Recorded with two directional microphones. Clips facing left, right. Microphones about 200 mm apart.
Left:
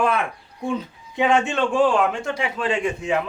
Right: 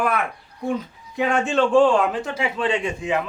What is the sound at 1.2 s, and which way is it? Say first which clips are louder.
Speech: left 2 dB; 75° left (ahead or behind).